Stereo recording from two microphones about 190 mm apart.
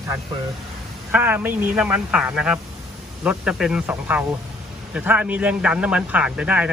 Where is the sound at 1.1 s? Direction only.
10° right (ahead or behind).